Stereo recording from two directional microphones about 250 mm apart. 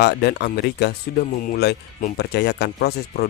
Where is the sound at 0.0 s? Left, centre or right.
Left.